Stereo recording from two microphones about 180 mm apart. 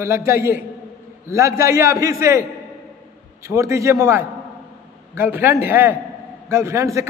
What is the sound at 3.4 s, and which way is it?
A man's voice, 15° right (ahead or behind).